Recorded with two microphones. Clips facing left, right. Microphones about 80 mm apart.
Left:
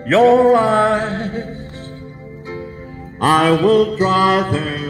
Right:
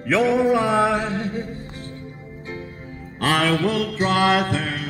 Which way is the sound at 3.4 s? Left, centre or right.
Left.